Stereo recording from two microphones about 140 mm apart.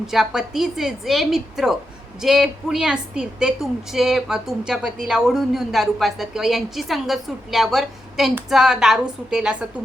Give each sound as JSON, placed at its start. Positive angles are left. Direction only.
{"t": 0.1, "sound": "a woman's voice", "side_deg": 0}